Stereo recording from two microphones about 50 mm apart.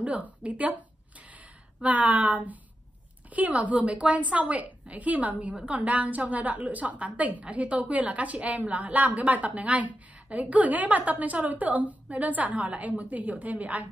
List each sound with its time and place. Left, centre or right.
0.0 s a woman's voice: right